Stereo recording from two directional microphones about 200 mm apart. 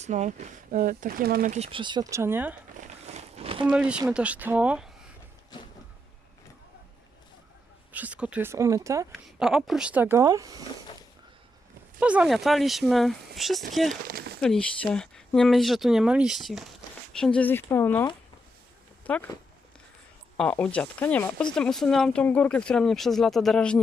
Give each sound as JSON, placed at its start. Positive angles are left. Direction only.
{"t": 0.0, "sound": "speech", "side_deg": -35}
{"t": 3.0, "sound": "a sound", "side_deg": -30}
{"t": 3.7, "sound": "speech", "side_deg": -5}
{"t": 7.9, "sound": "speech", "side_deg": -5}
{"t": 9.4, "sound": "speech", "side_deg": 0}
{"t": 11.9, "sound": "speech", "side_deg": -5}
{"t": 14.1, "sound": "speech", "side_deg": -50}
{"t": 14.4, "sound": "speech", "side_deg": 5}
{"t": 20.3, "sound": "speech", "side_deg": 5}